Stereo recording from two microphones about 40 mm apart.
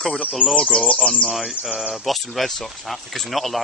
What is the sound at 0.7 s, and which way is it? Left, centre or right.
Speech, left.